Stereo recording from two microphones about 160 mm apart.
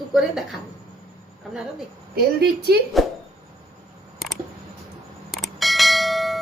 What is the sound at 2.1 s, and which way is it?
Speech, 90° right.